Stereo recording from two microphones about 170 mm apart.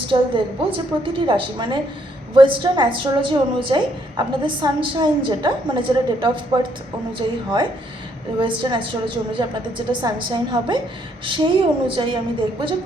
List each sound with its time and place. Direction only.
0.1 s a woman's voice: 30° right (ahead or behind)